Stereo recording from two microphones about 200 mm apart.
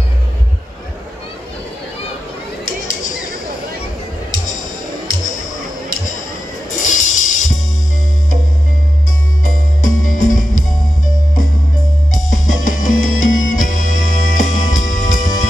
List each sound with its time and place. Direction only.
2.6 s a sound: 40° left (ahead or behind)
6.8 s music: 40° left (ahead or behind)
9.8 s music: 40° left (ahead or behind)
12.1 s music: 40° left (ahead or behind)